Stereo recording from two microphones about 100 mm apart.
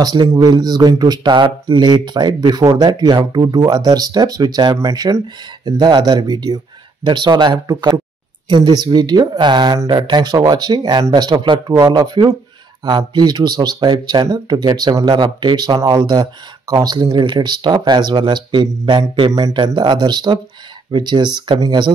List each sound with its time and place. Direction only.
0.0 s speech: 45° right (ahead or behind)
11.3 s a man's voice: 55° right (ahead or behind)
11.7 s speech: 40° right (ahead or behind)